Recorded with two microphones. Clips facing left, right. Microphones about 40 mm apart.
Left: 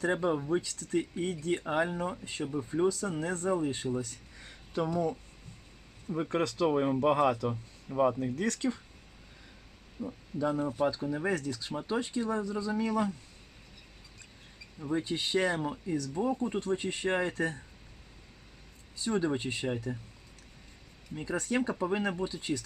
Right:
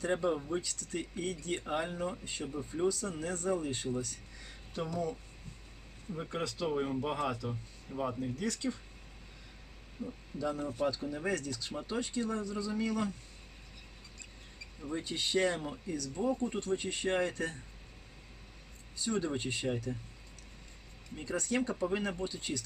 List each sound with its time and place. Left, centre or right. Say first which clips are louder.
0.0 s speech: left 3 dB; left
6.3 s speech: left 7 dB; left
6.7 s speech: left 7 dB; left
7.9 s speech: left 9 dB; centre
8.2 s speech: left 4 dB; left
10.1 s speech: left 5 dB; centre
14.8 s speech: left 5 dB; centre
19.0 s speech: left 4 dB; centre
21.2 s speech: left 2 dB; centre